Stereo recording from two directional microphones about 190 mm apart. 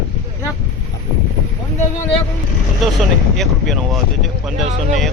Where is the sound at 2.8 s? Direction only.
Centre (ahead or behind).